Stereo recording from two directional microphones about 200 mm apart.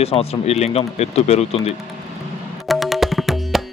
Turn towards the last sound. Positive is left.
turn(degrees=0)  # may be behind; listen again after turning